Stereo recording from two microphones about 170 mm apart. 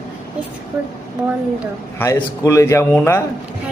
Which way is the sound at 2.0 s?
15° left (ahead or behind).